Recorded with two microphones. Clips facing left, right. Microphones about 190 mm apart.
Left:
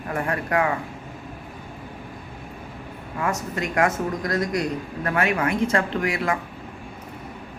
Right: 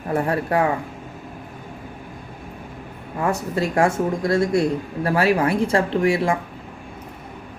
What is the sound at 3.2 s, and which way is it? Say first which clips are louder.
Speech: right 4 dB; 30° right (ahead or behind).